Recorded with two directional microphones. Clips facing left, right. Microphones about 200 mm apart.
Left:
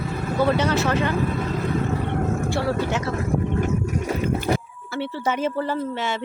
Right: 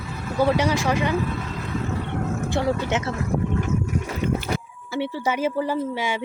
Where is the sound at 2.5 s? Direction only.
20° right (ahead or behind).